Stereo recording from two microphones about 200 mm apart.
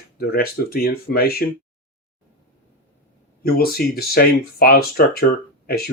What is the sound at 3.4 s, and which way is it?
Speech, 50° left (ahead or behind).